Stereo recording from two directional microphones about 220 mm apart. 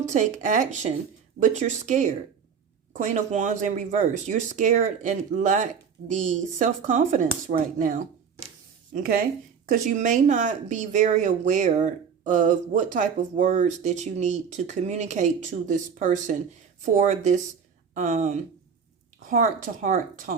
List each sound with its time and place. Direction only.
0.0 s speech: 35° right (ahead or behind)